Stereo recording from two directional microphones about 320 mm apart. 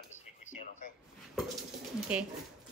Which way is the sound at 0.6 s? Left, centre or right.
Left.